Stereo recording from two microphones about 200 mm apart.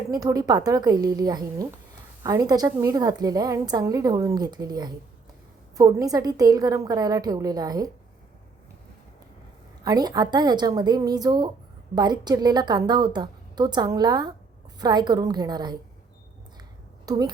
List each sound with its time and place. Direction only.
0.1 s a woman's voice: 15° right (ahead or behind)
9.8 s a woman's voice: 20° right (ahead or behind)
17.1 s a woman's voice: 20° right (ahead or behind)